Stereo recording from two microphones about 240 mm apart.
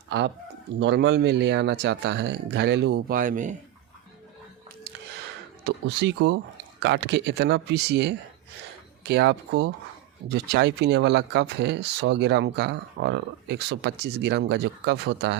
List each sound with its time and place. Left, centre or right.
0.8 s speech: right
5.6 s speech: right